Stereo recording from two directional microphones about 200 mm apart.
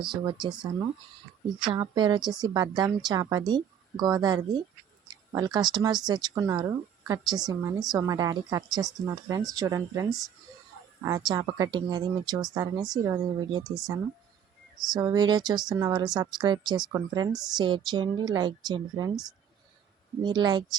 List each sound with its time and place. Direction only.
0.0 s a woman's voice: 25° right (ahead or behind)
20.2 s speech: 20° right (ahead or behind)